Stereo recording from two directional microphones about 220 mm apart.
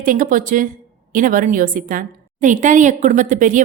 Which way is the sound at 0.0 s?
40° right (ahead or behind).